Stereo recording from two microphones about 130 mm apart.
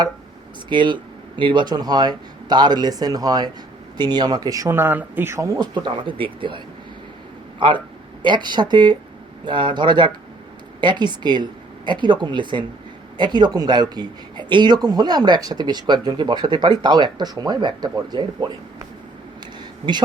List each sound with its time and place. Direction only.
0.7 s speech: 35° right (ahead or behind)
8.2 s speech: 35° right (ahead or behind)